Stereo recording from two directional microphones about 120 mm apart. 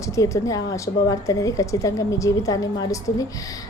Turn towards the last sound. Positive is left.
turn(degrees=30)  # may be behind; listen again after turning